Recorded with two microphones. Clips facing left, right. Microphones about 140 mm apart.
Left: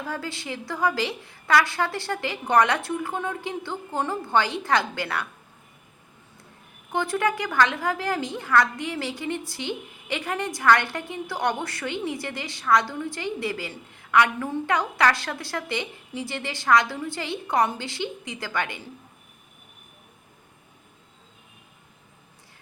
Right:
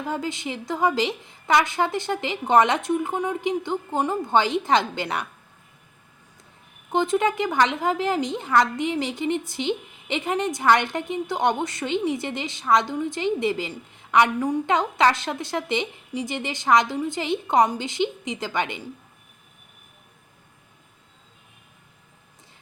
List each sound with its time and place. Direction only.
0.0 s a woman's voice: 20° right (ahead or behind)
6.9 s a woman's voice: 20° right (ahead or behind)